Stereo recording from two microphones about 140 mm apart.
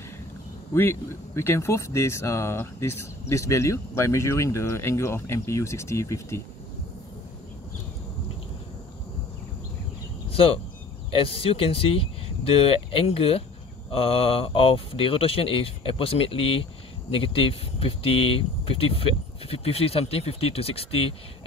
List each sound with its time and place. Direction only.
0.7 s speech: 15° left (ahead or behind)
10.3 s speech: 40° left (ahead or behind)